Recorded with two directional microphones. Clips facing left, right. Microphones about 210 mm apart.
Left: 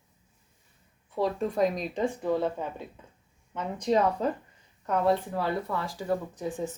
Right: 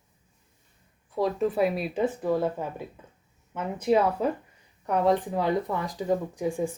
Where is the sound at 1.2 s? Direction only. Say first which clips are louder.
Right 2 dB; centre (ahead or behind).